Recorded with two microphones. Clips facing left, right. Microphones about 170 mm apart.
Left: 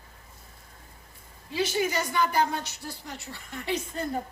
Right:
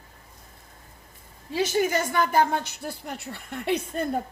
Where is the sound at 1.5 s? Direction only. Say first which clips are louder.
Right 4 dB; 45° right (ahead or behind).